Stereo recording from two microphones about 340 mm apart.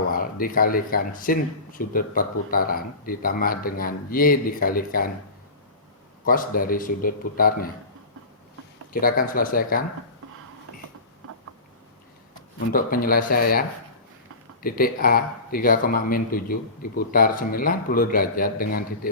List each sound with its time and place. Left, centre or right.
0.1 s speech: left
6.2 s speech: left
8.9 s speech: left
12.5 s speech: left